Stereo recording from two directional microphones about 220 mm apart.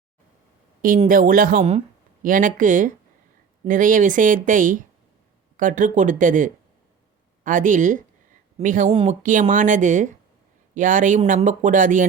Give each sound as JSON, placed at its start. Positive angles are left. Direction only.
{"t": 0.9, "sound": "speech", "side_deg": -35}